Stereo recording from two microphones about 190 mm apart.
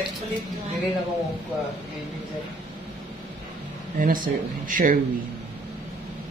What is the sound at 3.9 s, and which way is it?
Speech, 45° right (ahead or behind).